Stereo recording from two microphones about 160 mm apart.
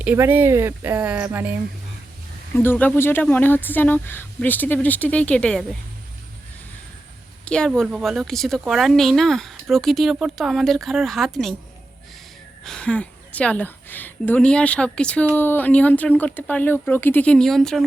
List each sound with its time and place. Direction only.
0.0 s speech: 10° right (ahead or behind)
2.6 s speech: 10° left (ahead or behind)
7.4 s a woman's voice: 5° left (ahead or behind)
12.6 s speech: 5° left (ahead or behind)